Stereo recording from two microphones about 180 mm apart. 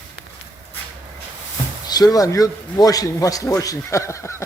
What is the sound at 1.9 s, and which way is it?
A man's voice, 20° left (ahead or behind).